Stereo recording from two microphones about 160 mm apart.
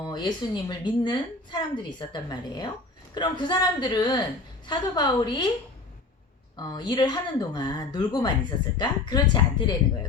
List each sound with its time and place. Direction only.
0.0 s speech: 30° left (ahead or behind)
6.6 s speech: 25° left (ahead or behind)